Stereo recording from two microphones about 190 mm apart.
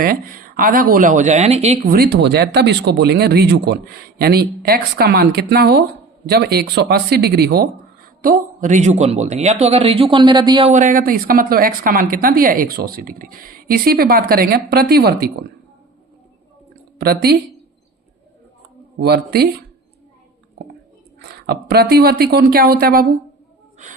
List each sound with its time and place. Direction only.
0.0 s speech: 50° right (ahead or behind)
8.2 s a man's voice: 45° right (ahead or behind); by 10.7 s 25° right (ahead or behind)
10.7 s speech: 45° right (ahead or behind)
17.0 s speech: 55° right (ahead or behind)
18.9 s speech: 55° right (ahead or behind)
21.2 s speech: 60° right (ahead or behind)